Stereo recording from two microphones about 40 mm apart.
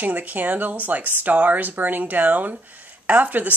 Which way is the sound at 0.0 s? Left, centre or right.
Right.